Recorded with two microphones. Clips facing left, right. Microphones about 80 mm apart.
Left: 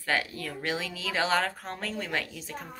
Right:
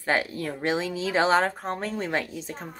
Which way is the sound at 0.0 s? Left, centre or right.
Right.